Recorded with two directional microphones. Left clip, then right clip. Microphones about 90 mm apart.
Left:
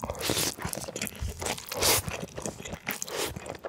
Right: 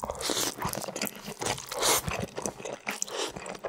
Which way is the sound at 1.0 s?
35° left (ahead or behind).